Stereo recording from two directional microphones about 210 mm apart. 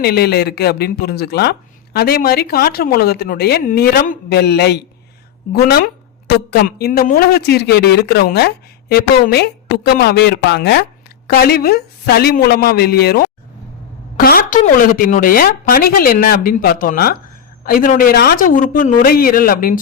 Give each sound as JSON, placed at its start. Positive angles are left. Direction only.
{"t": 0.0, "sound": "speech", "side_deg": 50}